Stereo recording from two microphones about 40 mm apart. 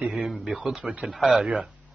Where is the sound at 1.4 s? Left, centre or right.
Right.